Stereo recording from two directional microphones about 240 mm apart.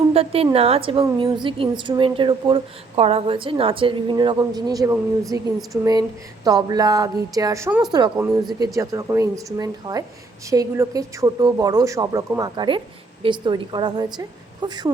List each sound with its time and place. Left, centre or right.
0.1 s a woman's voice: right
8.1 s speech: centre
8.6 s a woman's voice: centre